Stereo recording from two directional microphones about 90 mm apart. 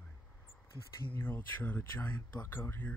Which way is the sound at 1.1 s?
25° left (ahead or behind).